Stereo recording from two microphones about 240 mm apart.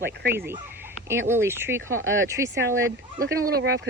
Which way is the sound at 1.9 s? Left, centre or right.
Right.